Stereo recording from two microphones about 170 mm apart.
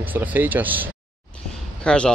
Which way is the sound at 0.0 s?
10° right (ahead or behind).